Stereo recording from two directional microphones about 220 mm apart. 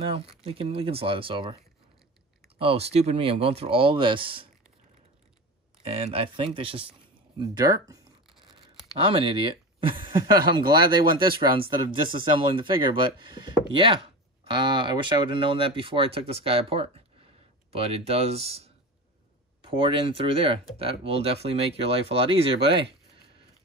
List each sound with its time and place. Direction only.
0.0 s speech: 25° right (ahead or behind)
2.6 s speech: 25° right (ahead or behind)
5.8 s speech: 25° right (ahead or behind)